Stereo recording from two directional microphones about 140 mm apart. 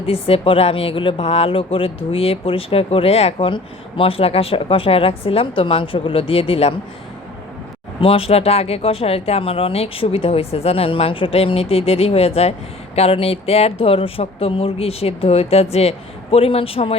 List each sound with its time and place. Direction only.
0.0 s speech: 45° left (ahead or behind)
8.0 s speech: 40° left (ahead or behind)